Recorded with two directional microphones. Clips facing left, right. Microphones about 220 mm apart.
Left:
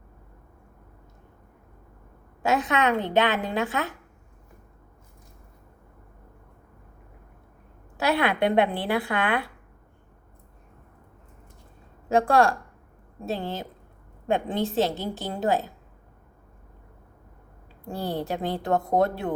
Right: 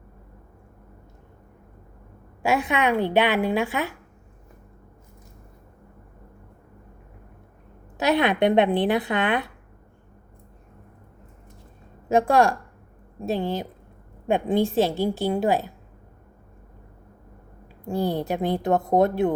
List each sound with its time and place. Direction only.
2.4 s a woman's voice: 15° right (ahead or behind)
7.9 s speech: 20° right (ahead or behind)
12.0 s a woman's voice: 15° right (ahead or behind)
17.8 s a woman's voice: 15° right (ahead or behind)